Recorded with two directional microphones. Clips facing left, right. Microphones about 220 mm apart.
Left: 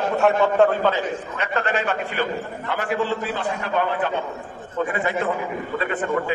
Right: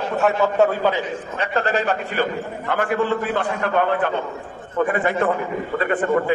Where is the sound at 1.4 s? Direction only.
35° right (ahead or behind).